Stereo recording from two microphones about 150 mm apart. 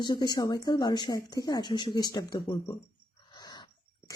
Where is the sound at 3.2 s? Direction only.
30° left (ahead or behind).